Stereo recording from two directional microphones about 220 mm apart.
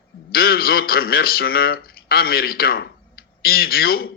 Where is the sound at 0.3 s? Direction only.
45° left (ahead or behind).